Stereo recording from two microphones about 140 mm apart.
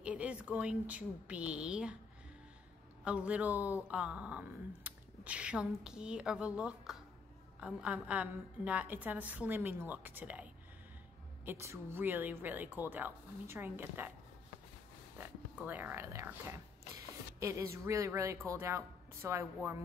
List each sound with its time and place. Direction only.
0.0 s speech: 10° right (ahead or behind)
3.0 s speech: 10° right (ahead or behind)
15.1 s a woman's voice: 15° right (ahead or behind)